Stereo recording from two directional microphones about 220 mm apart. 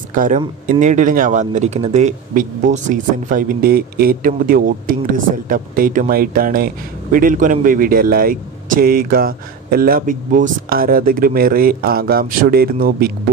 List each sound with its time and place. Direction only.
0.1 s speech: 35° right (ahead or behind)